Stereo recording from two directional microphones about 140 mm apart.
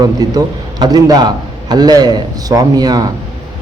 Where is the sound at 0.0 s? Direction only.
30° right (ahead or behind).